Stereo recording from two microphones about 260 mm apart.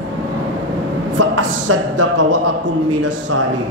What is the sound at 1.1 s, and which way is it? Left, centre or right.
Speech, right.